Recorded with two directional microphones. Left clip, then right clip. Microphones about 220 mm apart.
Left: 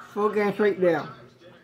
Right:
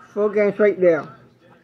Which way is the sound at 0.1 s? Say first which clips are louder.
Right 5 dB; 20° left (ahead or behind).